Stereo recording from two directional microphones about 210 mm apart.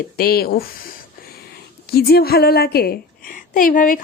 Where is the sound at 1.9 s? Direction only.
45° left (ahead or behind).